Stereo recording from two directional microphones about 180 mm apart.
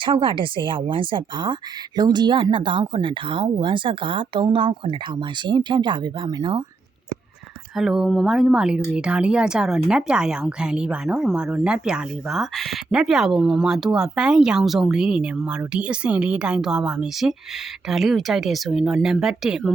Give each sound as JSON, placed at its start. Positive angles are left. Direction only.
{"t": 0.0, "sound": "speech", "side_deg": -25}
{"t": 7.8, "sound": "speech", "side_deg": 0}